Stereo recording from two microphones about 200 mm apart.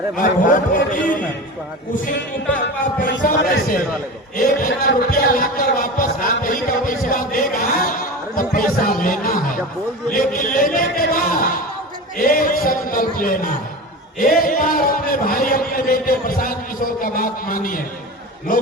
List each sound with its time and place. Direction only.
0.2 s a man's voice: 40° left (ahead or behind)
4.4 s a sound: 50° left (ahead or behind)
14.2 s a man's voice: 45° left (ahead or behind)